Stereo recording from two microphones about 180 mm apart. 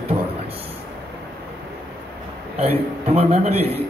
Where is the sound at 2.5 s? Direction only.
35° right (ahead or behind).